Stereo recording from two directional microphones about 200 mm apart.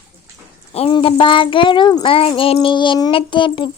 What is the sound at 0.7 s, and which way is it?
A child's voice, 30° left (ahead or behind).